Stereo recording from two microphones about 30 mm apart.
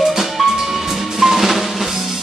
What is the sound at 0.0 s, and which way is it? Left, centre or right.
Music, centre.